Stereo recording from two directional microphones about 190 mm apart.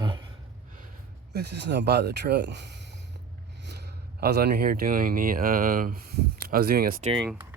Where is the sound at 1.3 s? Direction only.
60° right (ahead or behind).